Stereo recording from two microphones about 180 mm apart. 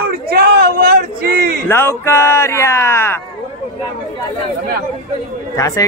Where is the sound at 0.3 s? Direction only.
60° right (ahead or behind).